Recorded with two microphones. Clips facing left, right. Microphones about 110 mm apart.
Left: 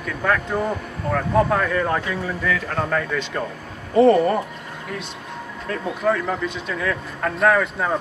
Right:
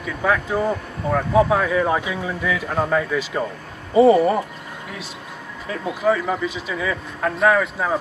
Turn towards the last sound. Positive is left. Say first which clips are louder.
# even
turn(degrees=0)  # may be behind; listen again after turning